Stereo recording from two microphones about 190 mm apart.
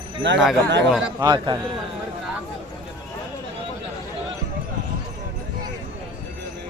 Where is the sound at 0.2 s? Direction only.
70° right (ahead or behind).